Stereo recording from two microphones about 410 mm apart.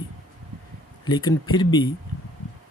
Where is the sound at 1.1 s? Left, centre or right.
Centre.